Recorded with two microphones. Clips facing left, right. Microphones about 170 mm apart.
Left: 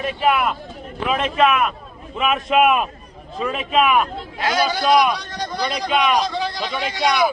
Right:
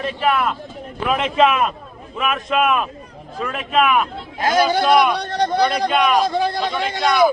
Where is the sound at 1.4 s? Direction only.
30° right (ahead or behind).